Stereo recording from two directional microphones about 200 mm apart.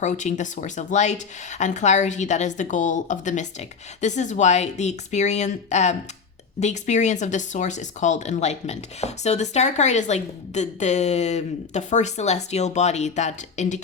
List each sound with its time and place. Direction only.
0.0 s speech: 35° left (ahead or behind)